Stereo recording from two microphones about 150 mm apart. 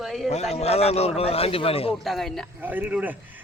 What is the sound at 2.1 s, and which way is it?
Speech, centre (ahead or behind).